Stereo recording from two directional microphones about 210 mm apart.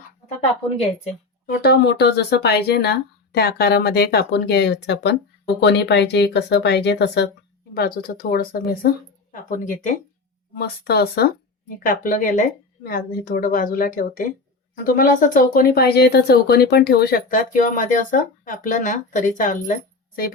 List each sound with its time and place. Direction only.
1.6 s speech: 50° left (ahead or behind)
10.5 s speech: 50° left (ahead or behind)